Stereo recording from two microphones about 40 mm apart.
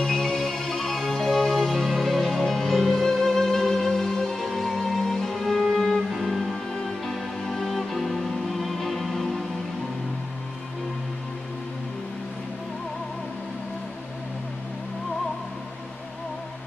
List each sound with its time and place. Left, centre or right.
0.0 s music: centre